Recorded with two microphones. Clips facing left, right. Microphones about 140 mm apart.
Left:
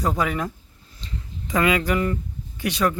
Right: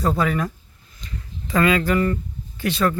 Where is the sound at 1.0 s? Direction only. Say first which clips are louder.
Even; 20° left (ahead or behind).